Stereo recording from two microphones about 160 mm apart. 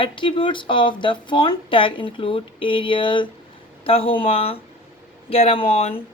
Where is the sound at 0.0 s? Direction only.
30° left (ahead or behind).